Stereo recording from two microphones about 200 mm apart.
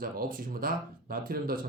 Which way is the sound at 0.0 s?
45° right (ahead or behind).